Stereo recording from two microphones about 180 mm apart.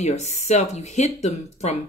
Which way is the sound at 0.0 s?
40° left (ahead or behind).